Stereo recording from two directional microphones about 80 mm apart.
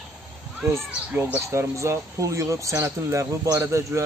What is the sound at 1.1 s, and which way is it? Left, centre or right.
Speech, right.